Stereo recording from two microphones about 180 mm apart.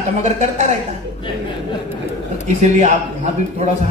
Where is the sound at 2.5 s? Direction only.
40° right (ahead or behind).